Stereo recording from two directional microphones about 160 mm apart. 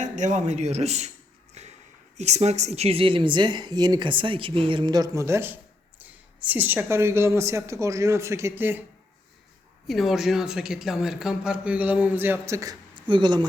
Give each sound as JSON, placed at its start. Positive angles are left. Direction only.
{"t": 0.0, "sound": "speech", "side_deg": -50}
{"t": 1.6, "sound": "a sound", "side_deg": -45}
{"t": 2.1, "sound": "a woman's voice", "side_deg": -45}
{"t": 9.8, "sound": "speech", "side_deg": 0}
{"t": 13.0, "sound": "speech", "side_deg": -30}